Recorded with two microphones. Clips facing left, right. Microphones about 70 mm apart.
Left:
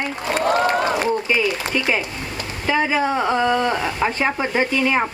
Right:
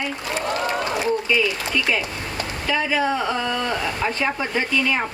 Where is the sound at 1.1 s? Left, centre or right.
Left.